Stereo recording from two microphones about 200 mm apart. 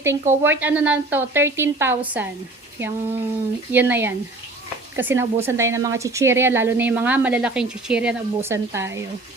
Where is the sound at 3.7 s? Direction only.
10° right (ahead or behind).